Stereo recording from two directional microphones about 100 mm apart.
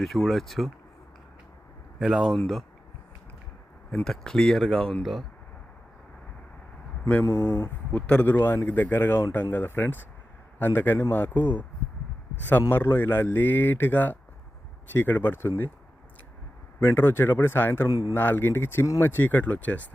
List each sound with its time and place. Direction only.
0.0 s speech: centre (ahead or behind)
2.0 s speech: 5° right (ahead or behind)
3.9 s speech: 5° left (ahead or behind)
7.7 s a man's voice: 15° left (ahead or behind)
16.8 s a man's voice: 20° left (ahead or behind)